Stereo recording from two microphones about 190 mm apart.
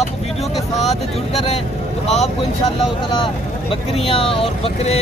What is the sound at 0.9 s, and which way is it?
Speech, 35° left (ahead or behind).